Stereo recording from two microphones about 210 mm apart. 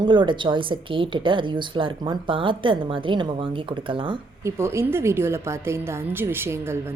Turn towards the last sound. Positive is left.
turn(degrees=-10)  # may be behind; listen again after turning